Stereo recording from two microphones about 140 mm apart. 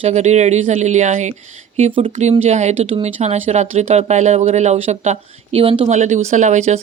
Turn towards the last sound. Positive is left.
turn(degrees=-55)  # may be behind; listen again after turning